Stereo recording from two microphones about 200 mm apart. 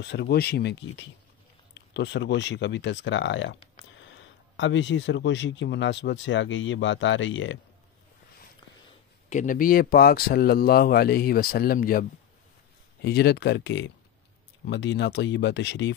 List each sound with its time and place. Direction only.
0.0 s speech: 55° left (ahead or behind)
9.3 s speech: 40° left (ahead or behind); by 15.9 s 60° left (ahead or behind)